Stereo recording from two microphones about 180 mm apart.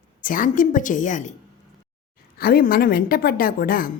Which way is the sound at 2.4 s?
55° left (ahead or behind).